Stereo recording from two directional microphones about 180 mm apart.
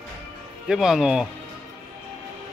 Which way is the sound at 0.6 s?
Centre (ahead or behind).